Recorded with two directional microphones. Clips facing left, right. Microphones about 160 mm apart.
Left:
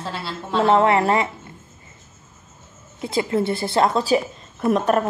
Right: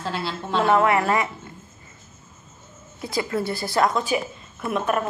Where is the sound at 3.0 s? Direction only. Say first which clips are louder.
Left 4 dB; 25° left (ahead or behind).